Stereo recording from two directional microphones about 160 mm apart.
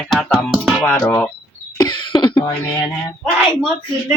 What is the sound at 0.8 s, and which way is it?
Dishes, 15° left (ahead or behind).